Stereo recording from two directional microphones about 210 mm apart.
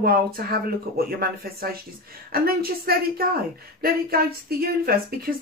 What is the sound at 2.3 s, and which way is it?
Speech, 45° right (ahead or behind).